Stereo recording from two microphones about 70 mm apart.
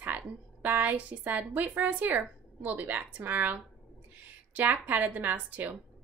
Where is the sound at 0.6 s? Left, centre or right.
Right.